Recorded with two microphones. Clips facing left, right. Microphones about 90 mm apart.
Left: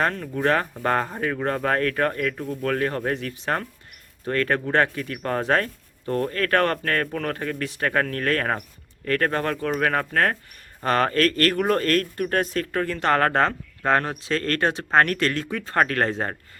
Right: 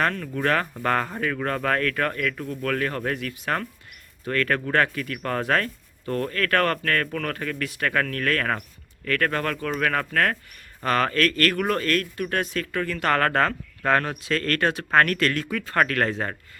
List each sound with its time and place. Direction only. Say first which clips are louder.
0.0 s speech: left 1 dB; 25° left (ahead or behind)